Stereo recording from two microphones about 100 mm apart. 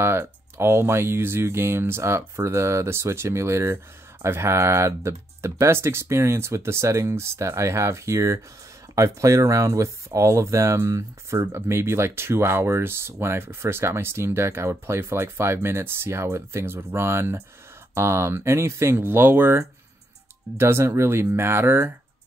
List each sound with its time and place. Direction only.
0.6 s speech: 25° right (ahead or behind)